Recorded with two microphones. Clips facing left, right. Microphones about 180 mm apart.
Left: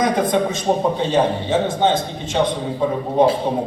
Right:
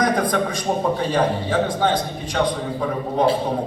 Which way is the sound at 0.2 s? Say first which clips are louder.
Left 3 dB; 25° left (ahead or behind).